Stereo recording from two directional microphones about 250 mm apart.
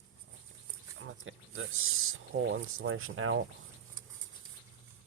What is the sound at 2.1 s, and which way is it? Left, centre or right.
Speech, right.